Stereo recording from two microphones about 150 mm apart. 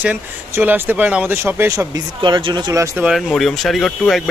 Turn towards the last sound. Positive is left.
turn(degrees=0)  # may be behind; listen again after turning